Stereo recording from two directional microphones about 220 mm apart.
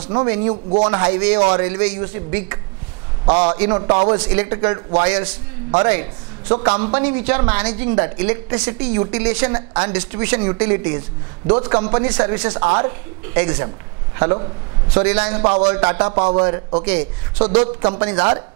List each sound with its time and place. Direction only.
0.1 s a man's voice: 20° right (ahead or behind)
1.7 s a woman's voice: 10° right (ahead or behind)
3.3 s a man's voice: 25° right (ahead or behind)